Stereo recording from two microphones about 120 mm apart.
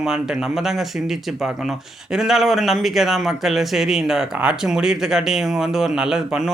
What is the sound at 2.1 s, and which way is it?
Speech, 5° right (ahead or behind).